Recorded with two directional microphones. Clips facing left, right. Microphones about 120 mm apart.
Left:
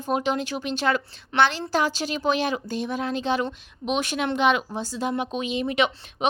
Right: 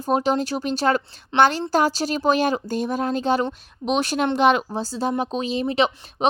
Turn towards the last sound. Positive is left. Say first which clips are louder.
# right 3 dB
turn(degrees=-30)  # may be behind; listen again after turning